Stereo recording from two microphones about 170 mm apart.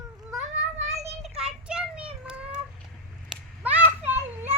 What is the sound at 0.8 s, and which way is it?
Child singing, 40° right (ahead or behind).